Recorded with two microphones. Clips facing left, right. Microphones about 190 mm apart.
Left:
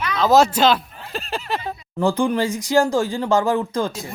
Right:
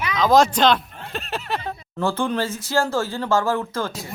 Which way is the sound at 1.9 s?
15° left (ahead or behind).